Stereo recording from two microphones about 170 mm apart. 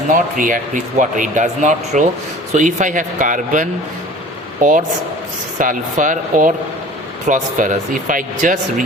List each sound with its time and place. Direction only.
0.1 s a man's voice: 55° right (ahead or behind)